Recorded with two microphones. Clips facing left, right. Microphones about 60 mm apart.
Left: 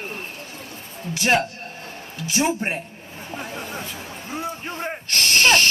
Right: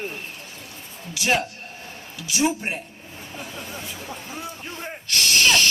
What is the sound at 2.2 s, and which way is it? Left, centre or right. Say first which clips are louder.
Speech: left 1 dB; left.